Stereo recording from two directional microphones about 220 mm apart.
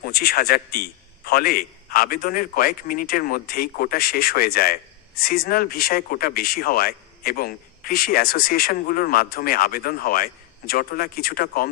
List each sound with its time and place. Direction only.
0.0 s a man's voice: 45° left (ahead or behind)